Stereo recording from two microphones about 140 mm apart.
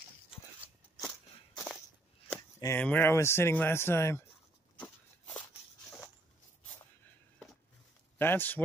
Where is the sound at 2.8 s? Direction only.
10° left (ahead or behind).